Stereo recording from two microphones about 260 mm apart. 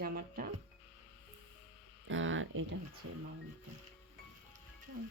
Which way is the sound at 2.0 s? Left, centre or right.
Right.